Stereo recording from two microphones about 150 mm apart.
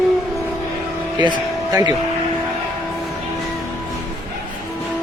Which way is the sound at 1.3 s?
30° right (ahead or behind).